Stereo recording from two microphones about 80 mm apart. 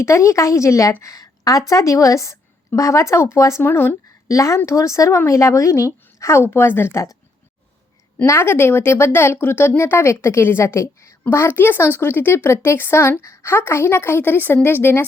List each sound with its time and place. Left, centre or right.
0.0 s a woman's voice: left
3.7 s speech: left
4.4 s speech: left
8.3 s speech: left